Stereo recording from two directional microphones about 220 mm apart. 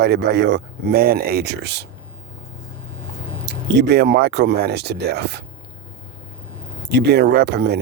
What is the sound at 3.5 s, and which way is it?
Speech, 50° right (ahead or behind).